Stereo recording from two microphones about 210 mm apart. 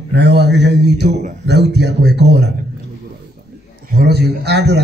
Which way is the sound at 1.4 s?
55° right (ahead or behind).